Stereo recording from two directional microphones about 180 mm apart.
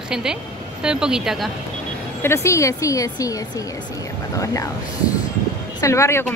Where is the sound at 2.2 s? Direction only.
15° left (ahead or behind).